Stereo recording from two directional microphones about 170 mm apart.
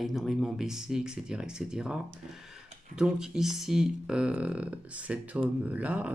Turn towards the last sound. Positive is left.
turn(degrees=-10)  # may be behind; listen again after turning